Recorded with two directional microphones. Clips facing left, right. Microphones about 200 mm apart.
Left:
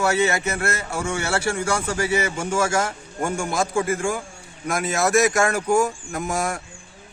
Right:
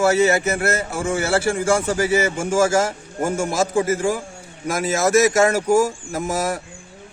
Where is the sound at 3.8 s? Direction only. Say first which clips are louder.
Right 4 dB; 35° right (ahead or behind).